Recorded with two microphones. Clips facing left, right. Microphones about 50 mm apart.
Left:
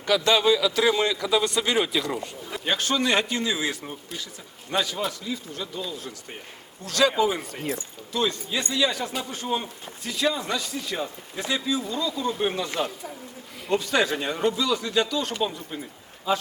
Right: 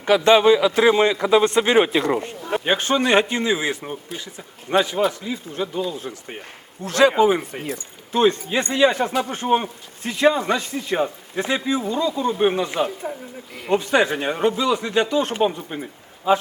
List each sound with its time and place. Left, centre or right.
0.0 s speech: right
2.6 s speech: right